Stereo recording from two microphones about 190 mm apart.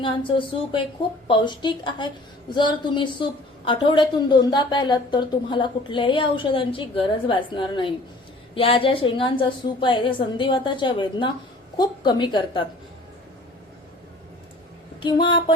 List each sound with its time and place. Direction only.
0.0 s a woman's voice: 25° left (ahead or behind)
15.0 s a woman's voice: 25° left (ahead or behind)